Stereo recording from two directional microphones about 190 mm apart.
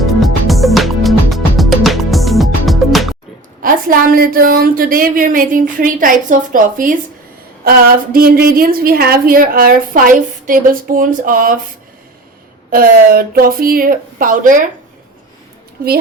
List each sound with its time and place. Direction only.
0.0 s music: centre (ahead or behind)
3.6 s a woman's voice: 50° right (ahead or behind)
12.7 s a woman's voice: 50° right (ahead or behind)